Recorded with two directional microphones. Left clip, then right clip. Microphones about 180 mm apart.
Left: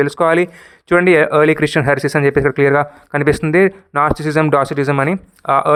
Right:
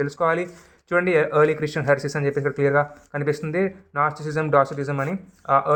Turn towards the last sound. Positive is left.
turn(degrees=40)  # may be behind; listen again after turning